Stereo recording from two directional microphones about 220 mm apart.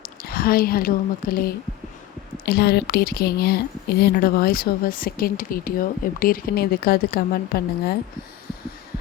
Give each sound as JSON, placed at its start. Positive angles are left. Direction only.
{"t": 0.0, "sound": "a woman's voice", "side_deg": 45}